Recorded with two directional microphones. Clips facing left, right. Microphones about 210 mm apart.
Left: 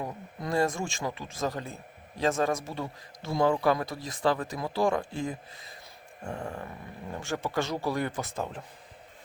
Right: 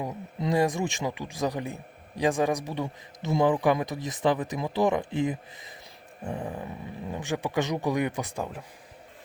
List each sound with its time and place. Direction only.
0.0 s speech: 20° right (ahead or behind)